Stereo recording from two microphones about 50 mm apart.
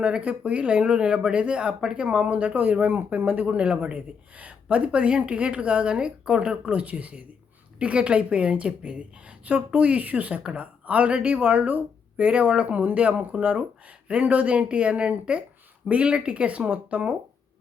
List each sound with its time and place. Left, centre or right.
0.0 s a woman's voice: right
2.0 s a woman's voice: right